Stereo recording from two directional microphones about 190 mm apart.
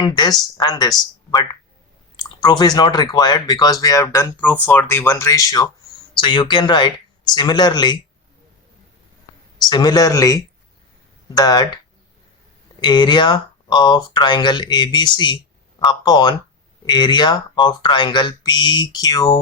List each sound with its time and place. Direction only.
0.0 s speech: 20° left (ahead or behind)
2.1 s speech: 20° left (ahead or behind)
9.6 s speech: 20° left (ahead or behind)
12.8 s speech: 25° left (ahead or behind)